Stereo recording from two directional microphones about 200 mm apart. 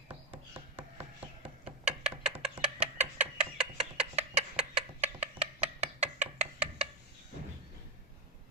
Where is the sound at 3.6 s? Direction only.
25° right (ahead or behind).